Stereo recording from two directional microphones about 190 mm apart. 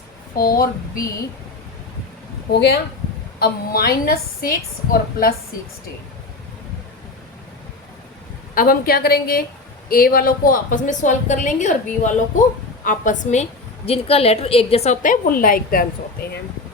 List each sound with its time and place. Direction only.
0.3 s a woman's voice: 50° left (ahead or behind)
2.5 s a woman's voice: 60° left (ahead or behind)
8.5 s a woman's voice: 50° left (ahead or behind)